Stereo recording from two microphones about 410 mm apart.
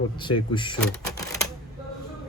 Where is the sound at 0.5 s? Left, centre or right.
Centre.